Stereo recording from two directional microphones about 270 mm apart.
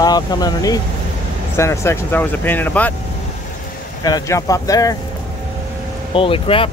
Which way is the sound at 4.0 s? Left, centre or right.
Centre.